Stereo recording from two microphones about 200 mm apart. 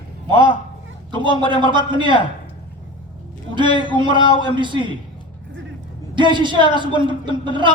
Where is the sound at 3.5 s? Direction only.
25° right (ahead or behind).